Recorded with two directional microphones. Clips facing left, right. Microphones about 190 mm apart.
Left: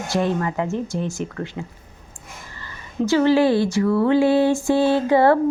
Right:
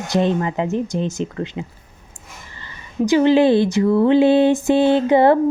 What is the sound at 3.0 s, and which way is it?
Speech, 20° right (ahead or behind).